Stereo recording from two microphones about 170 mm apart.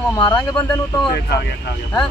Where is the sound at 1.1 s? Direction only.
70° left (ahead or behind).